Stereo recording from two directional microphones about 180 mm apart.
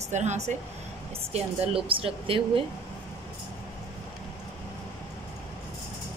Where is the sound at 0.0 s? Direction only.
40° right (ahead or behind).